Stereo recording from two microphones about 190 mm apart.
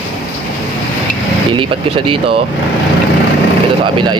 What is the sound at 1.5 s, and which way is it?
Speech, 25° right (ahead or behind).